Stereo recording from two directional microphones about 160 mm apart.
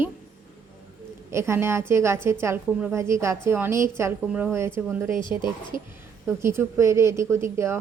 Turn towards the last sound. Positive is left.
turn(degrees=-15)  # may be behind; listen again after turning